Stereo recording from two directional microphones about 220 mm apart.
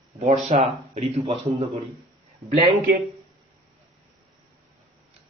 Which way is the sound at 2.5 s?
40° right (ahead or behind).